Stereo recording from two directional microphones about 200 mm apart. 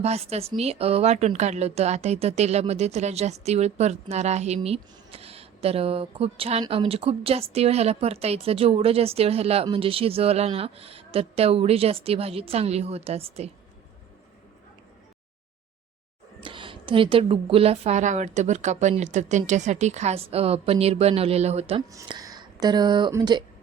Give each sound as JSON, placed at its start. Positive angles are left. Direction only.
{"t": 0.0, "sound": "speech", "side_deg": -30}
{"t": 16.4, "sound": "speech", "side_deg": -25}
{"t": 21.8, "sound": "speech", "side_deg": -20}